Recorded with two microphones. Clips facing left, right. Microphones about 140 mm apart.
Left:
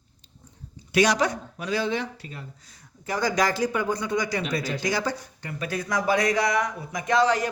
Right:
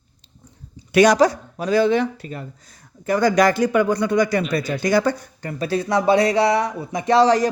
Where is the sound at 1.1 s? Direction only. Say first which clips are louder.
Right 9 dB; 35° right (ahead or behind).